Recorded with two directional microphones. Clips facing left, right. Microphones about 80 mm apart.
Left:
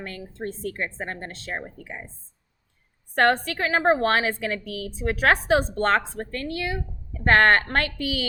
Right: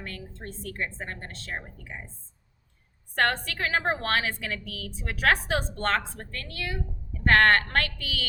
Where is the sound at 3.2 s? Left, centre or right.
Centre.